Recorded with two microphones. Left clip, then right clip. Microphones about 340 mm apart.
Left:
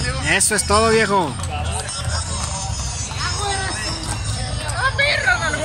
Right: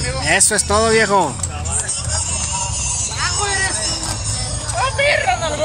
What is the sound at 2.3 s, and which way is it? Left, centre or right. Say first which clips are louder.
Music: right 4 dB; right.